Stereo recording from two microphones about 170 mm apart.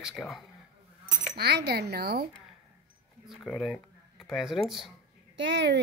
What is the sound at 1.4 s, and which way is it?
Speech, 70° right (ahead or behind).